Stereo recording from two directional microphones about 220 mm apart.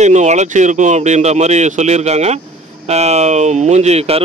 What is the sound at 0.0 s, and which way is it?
Speech, 30° right (ahead or behind).